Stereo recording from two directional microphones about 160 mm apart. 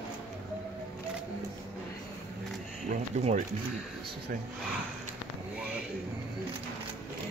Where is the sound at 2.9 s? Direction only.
45° right (ahead or behind).